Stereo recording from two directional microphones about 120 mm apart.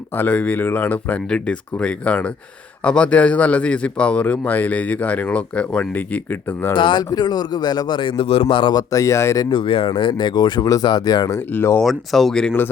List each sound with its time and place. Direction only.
0.2 s a man's voice: 15° left (ahead or behind)
6.7 s a man's voice: 40° left (ahead or behind)
8.7 s speech: 30° left (ahead or behind)
9.5 s a man's voice: 45° left (ahead or behind)
11.5 s speech: 20° left (ahead or behind)
11.8 s speech: centre (ahead or behind)